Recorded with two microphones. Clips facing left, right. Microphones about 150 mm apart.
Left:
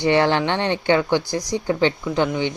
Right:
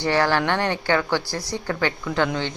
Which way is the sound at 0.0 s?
20° left (ahead or behind).